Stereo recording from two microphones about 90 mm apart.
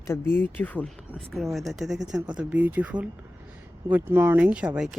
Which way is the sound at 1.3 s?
Centre (ahead or behind).